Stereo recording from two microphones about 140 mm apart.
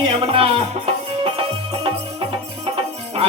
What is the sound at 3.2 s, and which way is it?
Music, 40° right (ahead or behind).